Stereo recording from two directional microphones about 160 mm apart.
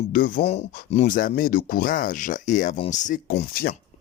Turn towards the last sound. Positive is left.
turn(degrees=70)  # may be behind; listen again after turning